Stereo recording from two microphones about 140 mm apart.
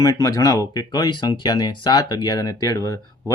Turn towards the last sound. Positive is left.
turn(degrees=25)  # may be behind; listen again after turning